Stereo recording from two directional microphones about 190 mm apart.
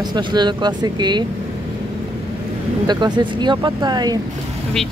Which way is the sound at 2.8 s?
25° right (ahead or behind).